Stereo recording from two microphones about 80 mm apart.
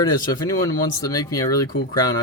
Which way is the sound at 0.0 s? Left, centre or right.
Left.